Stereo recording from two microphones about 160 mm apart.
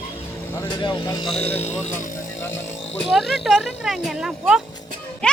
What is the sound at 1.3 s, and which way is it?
Speech, 40° left (ahead or behind).